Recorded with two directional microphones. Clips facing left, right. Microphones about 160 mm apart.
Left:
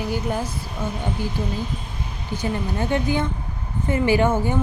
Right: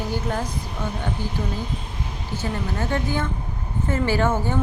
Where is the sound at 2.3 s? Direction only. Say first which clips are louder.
Left 2 dB; 15° left (ahead or behind).